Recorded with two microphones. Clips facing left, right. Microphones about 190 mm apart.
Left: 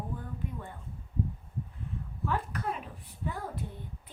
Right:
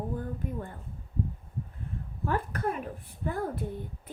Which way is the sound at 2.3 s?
50° right (ahead or behind).